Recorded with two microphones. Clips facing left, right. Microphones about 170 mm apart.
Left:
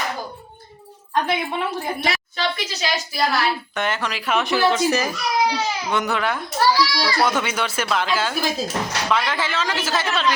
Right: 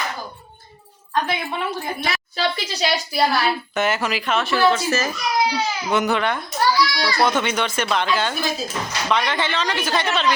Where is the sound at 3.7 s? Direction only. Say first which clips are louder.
Right 3 dB; 5° right (ahead or behind).